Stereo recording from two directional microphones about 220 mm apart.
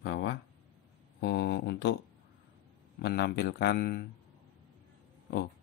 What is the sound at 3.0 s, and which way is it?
Speech, 50° left (ahead or behind).